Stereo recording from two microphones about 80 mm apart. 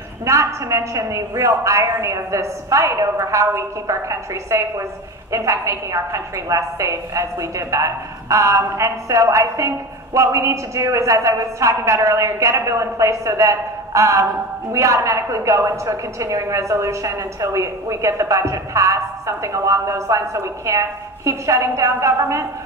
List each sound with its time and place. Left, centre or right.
0.2 s a woman's voice: right